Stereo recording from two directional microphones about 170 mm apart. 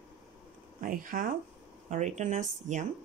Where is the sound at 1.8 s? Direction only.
45° right (ahead or behind).